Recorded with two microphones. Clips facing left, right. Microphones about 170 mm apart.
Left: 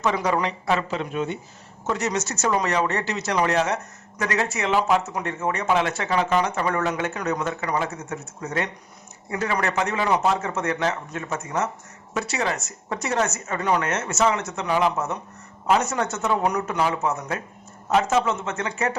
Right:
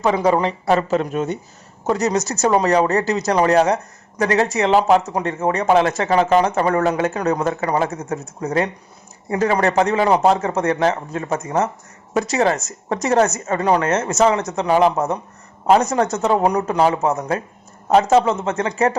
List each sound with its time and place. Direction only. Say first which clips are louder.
0.0 s speech: right 6 dB; 30° right (ahead or behind)